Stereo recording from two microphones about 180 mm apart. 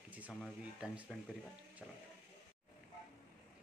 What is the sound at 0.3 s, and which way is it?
Speech, centre (ahead or behind).